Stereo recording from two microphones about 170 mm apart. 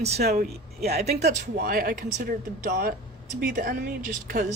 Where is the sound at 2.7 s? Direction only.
70° right (ahead or behind).